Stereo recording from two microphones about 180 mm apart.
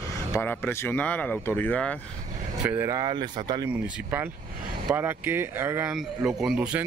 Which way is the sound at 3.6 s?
10° right (ahead or behind).